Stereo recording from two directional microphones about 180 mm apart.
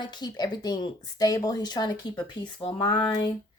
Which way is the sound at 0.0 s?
25° left (ahead or behind).